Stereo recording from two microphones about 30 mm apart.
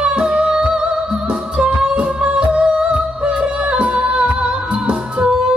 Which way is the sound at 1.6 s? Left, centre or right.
Right.